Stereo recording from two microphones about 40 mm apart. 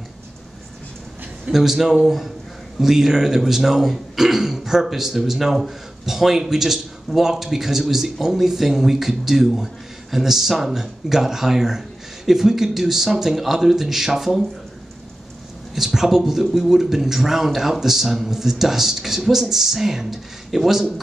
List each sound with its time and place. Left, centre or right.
1.5 s a man's voice: centre
15.7 s speech: centre